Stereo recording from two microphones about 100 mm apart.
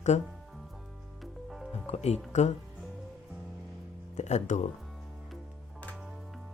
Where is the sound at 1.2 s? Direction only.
Centre (ahead or behind).